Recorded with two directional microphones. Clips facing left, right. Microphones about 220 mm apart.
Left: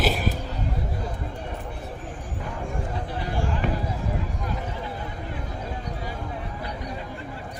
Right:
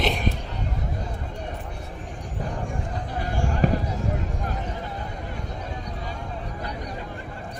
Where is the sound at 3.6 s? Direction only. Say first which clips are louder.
Right 7 dB; 40° right (ahead or behind).